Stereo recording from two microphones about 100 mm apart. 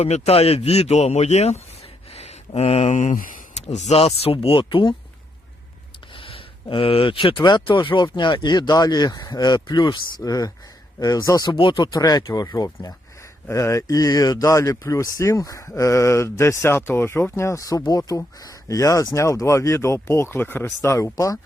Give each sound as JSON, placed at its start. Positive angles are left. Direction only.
{"t": 0.0, "sound": "speech", "side_deg": 85}
{"t": 2.1, "sound": "a sound", "side_deg": 90}
{"t": 3.5, "sound": "speech", "side_deg": 85}
{"t": 6.1, "sound": "a sound", "side_deg": 60}
{"t": 7.3, "sound": "speech", "side_deg": 50}
{"t": 11.5, "sound": "speech", "side_deg": 55}
{"t": 11.9, "sound": "speech", "side_deg": 35}
{"t": 20.8, "sound": "speech", "side_deg": 30}